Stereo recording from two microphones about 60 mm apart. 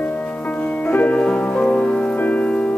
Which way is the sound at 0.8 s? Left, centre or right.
Left.